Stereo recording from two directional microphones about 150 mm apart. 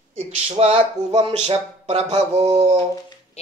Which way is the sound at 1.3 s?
40° right (ahead or behind).